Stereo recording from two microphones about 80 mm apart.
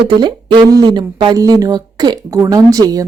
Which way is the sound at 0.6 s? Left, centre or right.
Right.